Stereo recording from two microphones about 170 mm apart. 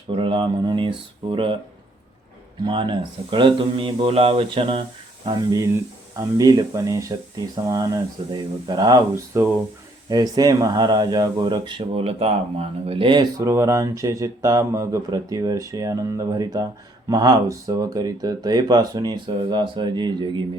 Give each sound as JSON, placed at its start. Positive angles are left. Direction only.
{"t": 0.2, "sound": "speech", "side_deg": -30}
{"t": 2.6, "sound": "speech", "side_deg": -30}
{"t": 13.4, "sound": "speech", "side_deg": -15}